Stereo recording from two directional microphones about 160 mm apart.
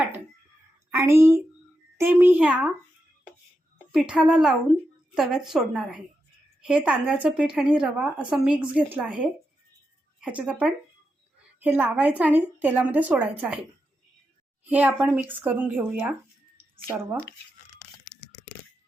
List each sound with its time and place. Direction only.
0.9 s a woman's voice: 15° right (ahead or behind)
3.9 s a woman's voice: 5° right (ahead or behind)
14.7 s a woman's voice: 10° right (ahead or behind)